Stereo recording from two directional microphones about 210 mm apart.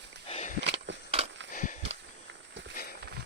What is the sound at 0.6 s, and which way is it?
Walk, 55° right (ahead or behind).